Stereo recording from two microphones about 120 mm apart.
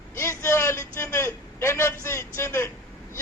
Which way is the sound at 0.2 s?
25° left (ahead or behind).